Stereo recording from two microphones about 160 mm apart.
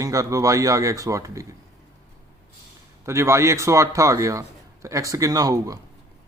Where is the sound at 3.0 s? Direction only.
15° right (ahead or behind).